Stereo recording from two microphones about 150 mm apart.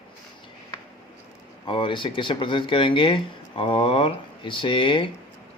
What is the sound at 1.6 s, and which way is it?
Speech, 35° left (ahead or behind).